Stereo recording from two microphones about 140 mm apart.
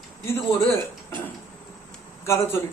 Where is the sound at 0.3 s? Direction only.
20° left (ahead or behind).